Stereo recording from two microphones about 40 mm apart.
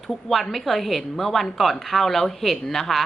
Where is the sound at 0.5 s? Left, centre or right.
Centre.